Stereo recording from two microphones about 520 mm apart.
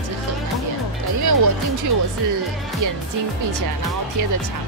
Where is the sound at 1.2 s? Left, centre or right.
Right.